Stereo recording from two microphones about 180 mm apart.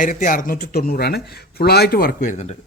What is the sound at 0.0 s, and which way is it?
Speech, 50° left (ahead or behind).